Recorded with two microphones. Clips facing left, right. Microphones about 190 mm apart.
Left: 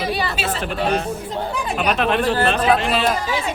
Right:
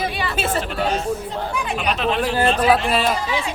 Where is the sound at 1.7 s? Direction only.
55° left (ahead or behind).